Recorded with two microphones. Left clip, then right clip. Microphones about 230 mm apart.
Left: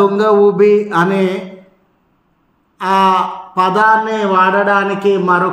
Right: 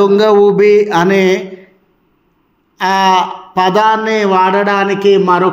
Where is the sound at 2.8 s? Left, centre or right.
Right.